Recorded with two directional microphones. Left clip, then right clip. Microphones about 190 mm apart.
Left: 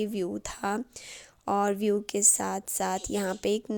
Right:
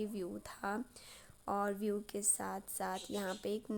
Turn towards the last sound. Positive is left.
turn(degrees=40)  # may be behind; listen again after turning